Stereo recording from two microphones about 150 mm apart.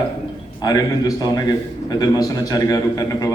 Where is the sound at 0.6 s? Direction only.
25° left (ahead or behind).